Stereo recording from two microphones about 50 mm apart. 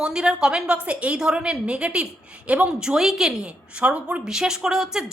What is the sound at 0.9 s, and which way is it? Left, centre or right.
A woman's voice, right.